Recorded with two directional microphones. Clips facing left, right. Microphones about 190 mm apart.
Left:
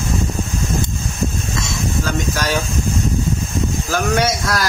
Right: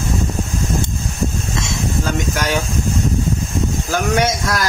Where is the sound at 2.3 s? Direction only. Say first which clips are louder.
Right 1 dB; 20° right (ahead or behind).